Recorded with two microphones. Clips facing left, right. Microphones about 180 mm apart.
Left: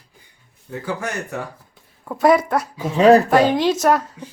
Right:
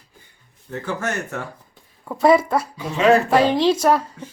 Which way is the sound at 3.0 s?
35° left (ahead or behind).